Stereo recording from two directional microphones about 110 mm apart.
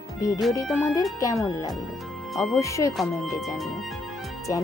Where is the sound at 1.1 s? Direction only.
30° left (ahead or behind).